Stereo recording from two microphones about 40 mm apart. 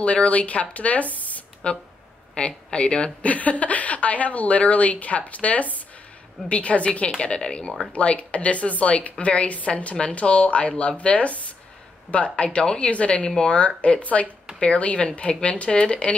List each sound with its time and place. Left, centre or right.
0.0 s a woman's voice: left
1.6 s speech: left
3.2 s a woman's voice: left